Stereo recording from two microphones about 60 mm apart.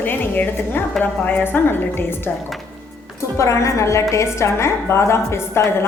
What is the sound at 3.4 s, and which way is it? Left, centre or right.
A woman's voice, left.